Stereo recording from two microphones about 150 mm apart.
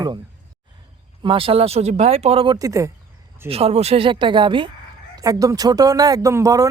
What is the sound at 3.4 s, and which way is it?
Speech, 40° right (ahead or behind).